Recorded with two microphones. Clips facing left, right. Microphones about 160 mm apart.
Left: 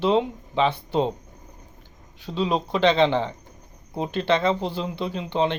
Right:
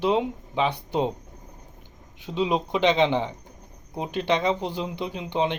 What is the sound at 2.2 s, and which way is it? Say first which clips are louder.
Speech: even; 15° right (ahead or behind).